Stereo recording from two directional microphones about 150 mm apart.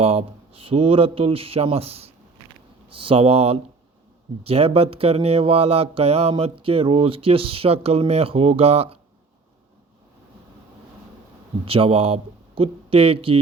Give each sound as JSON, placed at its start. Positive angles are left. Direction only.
{"t": 0.0, "sound": "mantra", "side_deg": -40}
{"t": 11.6, "sound": "mantra", "side_deg": -40}